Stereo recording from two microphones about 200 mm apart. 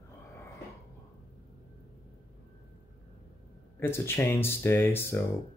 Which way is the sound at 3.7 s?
10° left (ahead or behind).